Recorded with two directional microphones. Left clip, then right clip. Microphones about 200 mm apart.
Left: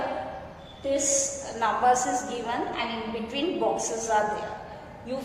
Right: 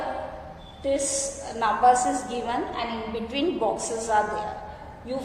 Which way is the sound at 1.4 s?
25° right (ahead or behind).